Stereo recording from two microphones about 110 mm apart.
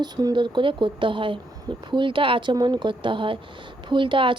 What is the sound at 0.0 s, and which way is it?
Speech, 40° right (ahead or behind).